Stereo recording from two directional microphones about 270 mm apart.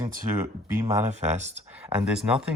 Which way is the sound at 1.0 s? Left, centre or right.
Right.